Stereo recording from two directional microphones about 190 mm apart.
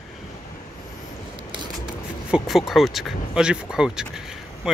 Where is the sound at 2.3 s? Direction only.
Centre (ahead or behind).